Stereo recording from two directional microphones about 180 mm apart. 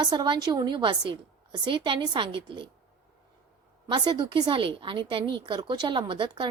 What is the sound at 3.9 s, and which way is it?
A woman's voice, 25° right (ahead or behind).